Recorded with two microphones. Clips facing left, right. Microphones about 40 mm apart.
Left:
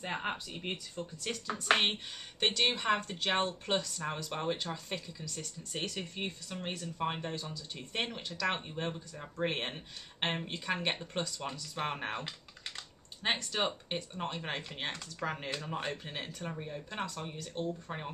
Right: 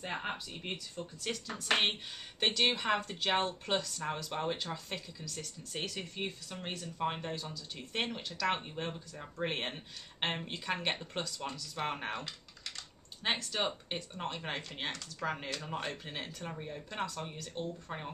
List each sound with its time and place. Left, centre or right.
0.0 s speech: centre
2.4 s speech: centre
12.1 s typing: centre
13.2 s speech: centre
14.9 s speech: centre
15.2 s speech: centre